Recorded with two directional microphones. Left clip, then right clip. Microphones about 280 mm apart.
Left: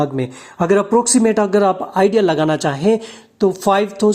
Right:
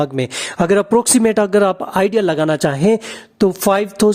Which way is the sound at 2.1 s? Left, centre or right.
Right.